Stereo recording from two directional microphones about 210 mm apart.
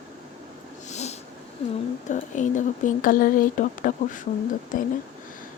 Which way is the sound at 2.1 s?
35° left (ahead or behind).